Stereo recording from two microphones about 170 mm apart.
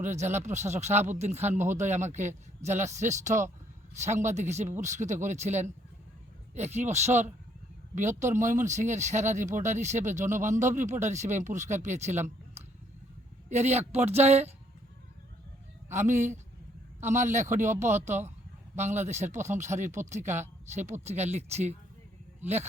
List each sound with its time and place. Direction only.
0.0 s speech: 45° right (ahead or behind)
15.9 s speech: 45° right (ahead or behind)